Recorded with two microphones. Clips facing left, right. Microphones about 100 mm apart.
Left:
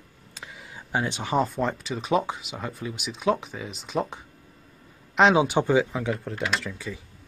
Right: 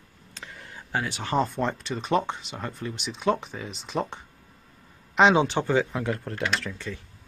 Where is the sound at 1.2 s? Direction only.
5° left (ahead or behind).